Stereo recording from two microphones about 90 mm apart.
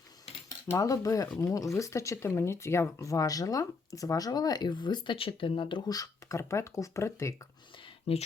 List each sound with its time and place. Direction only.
0.8 s speech: 40° left (ahead or behind); by 5.1 s 55° left (ahead or behind)
5.1 s speech: 85° left
5.9 s speech: 40° left (ahead or behind)
8.1 s speech: 90° left